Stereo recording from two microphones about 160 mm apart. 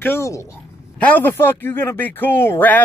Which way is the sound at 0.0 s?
15° left (ahead or behind).